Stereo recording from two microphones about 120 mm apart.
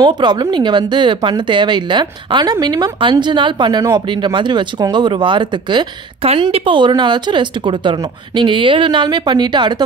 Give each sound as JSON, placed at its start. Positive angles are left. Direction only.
{"t": 0.0, "sound": "speech", "side_deg": -40}